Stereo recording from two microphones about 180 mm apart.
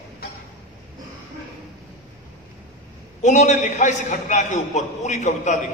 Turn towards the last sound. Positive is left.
turn(degrees=40)  # may be behind; listen again after turning